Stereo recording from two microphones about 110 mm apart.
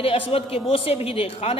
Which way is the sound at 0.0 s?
60° left (ahead or behind).